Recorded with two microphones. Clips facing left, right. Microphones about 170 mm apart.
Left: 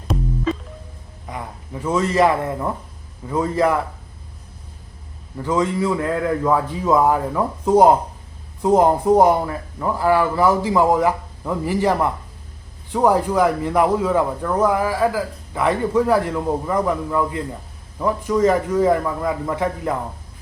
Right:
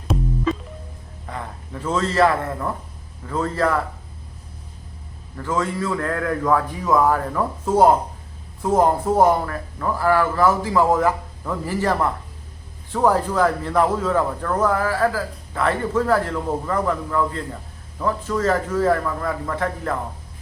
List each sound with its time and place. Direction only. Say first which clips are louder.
1.3 s a man's voice: left 1 dB; 15° left (ahead or behind)
5.4 s speech: left 4 dB; 20° left (ahead or behind)